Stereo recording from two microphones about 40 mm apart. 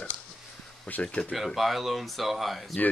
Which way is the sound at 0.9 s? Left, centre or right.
Left.